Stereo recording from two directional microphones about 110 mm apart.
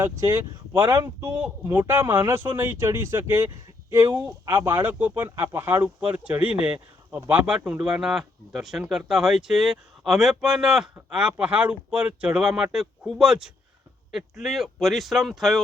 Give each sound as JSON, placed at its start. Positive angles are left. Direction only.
{"t": 0.0, "sound": "speech", "side_deg": -25}
{"t": 1.2, "sound": "speech", "side_deg": -20}